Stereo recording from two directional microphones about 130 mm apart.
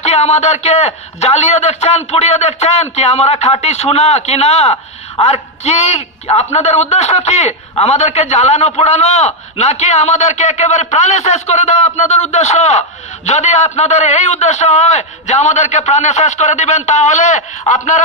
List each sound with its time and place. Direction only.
0.0 s a man's voice: 55° left (ahead or behind)